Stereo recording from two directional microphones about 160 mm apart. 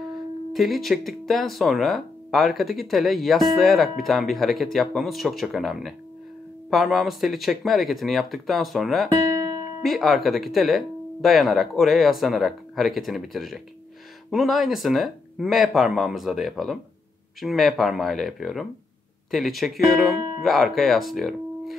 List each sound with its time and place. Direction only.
0.0 s speech: centre (ahead or behind)
9.1 s music: 20° right (ahead or behind)
9.8 s speech: centre (ahead or behind)